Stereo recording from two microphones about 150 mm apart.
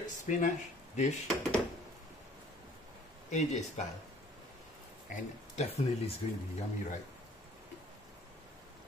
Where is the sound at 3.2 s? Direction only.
50° left (ahead or behind).